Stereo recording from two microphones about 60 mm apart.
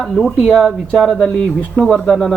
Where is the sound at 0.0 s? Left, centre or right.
Centre.